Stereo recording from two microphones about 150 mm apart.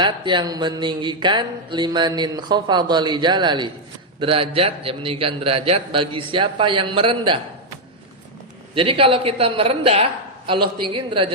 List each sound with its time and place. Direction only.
0.0 s speech: 30° right (ahead or behind)
8.7 s speech: 35° right (ahead or behind)